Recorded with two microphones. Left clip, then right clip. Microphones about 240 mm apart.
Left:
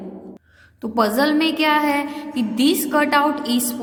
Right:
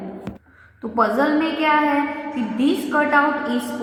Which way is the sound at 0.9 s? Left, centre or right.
Left.